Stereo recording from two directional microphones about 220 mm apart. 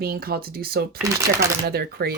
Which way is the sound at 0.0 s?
45° right (ahead or behind).